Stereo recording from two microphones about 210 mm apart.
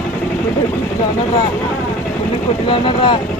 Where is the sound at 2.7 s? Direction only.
25° left (ahead or behind).